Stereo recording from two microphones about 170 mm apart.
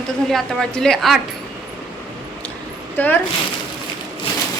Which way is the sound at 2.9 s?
10° left (ahead or behind).